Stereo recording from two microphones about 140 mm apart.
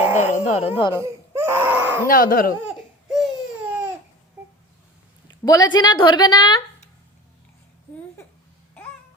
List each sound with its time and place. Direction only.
0.2 s a sound: 55° left (ahead or behind)
0.8 s a woman's voice: 30° left (ahead or behind)
1.0 s baby cry: 20° right (ahead or behind)
2.0 s speech: 90° left
2.6 s laughter: centre (ahead or behind)
5.5 s a woman's voice: 30° left (ahead or behind)